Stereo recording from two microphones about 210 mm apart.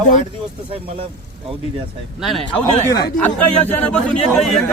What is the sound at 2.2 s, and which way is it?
Speech, centre (ahead or behind).